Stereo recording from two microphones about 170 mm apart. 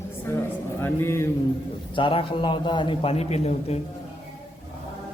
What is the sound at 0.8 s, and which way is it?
Speech, 15° left (ahead or behind).